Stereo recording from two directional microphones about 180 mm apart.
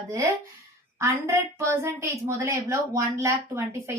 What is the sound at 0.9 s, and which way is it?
A woman's voice, 15° right (ahead or behind).